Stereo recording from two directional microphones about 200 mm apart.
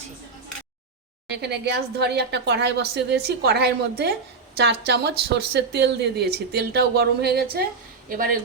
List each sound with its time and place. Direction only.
1.3 s speech: 55° right (ahead or behind)